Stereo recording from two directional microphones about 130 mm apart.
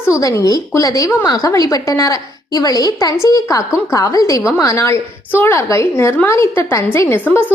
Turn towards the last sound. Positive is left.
turn(degrees=15)  # may be behind; listen again after turning